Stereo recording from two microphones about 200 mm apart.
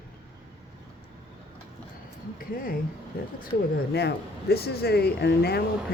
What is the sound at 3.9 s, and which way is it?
Speech, 55° left (ahead or behind).